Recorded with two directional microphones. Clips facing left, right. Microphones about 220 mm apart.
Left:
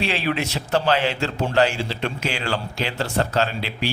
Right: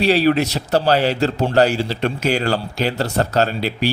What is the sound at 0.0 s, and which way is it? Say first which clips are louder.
A man's voice: right 9 dB; 40° right (ahead or behind).